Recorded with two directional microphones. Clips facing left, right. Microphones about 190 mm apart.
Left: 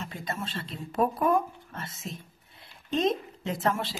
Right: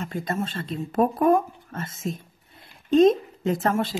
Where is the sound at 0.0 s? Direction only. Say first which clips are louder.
Right 7 dB; 50° right (ahead or behind).